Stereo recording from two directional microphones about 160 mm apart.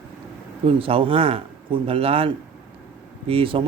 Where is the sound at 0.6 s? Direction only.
35° right (ahead or behind).